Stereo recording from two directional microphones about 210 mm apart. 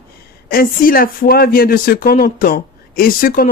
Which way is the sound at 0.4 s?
45° left (ahead or behind).